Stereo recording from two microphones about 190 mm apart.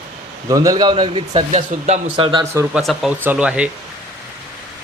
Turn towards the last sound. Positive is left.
turn(degrees=-5)  # may be behind; listen again after turning